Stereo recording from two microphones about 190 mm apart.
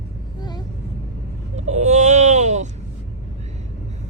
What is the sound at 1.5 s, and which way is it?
Baby cry, 35° right (ahead or behind).